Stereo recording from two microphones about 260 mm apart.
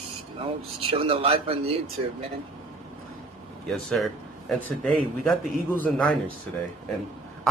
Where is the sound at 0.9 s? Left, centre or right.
Right.